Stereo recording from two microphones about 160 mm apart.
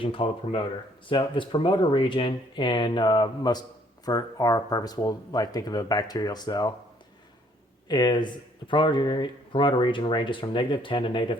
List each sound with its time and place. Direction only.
0.0 s speech: 35° left (ahead or behind)
7.9 s speech: 25° left (ahead or behind)